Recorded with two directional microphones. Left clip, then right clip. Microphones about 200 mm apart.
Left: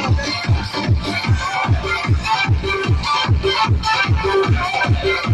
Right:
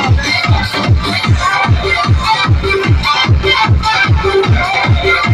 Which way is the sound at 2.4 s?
35° right (ahead or behind).